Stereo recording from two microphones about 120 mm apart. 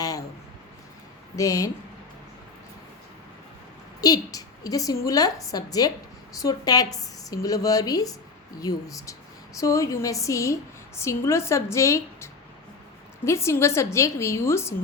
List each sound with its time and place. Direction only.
0.0 s a sound: 30° left (ahead or behind)
1.4 s a woman's voice: 25° left (ahead or behind)
4.0 s a woman's voice: 30° left (ahead or behind)